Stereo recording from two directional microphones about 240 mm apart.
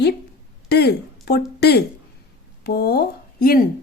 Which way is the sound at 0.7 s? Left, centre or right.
Left.